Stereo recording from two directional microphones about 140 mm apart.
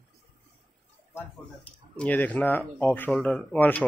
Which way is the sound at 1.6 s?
10° left (ahead or behind).